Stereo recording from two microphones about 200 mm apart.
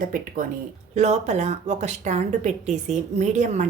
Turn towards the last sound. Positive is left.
turn(degrees=-35)  # may be behind; listen again after turning